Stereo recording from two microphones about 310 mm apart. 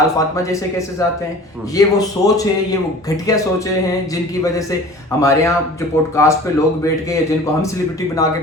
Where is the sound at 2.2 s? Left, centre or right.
Centre.